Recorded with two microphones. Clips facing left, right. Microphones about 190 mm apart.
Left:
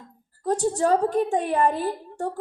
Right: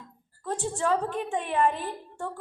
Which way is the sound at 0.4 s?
40° left (ahead or behind).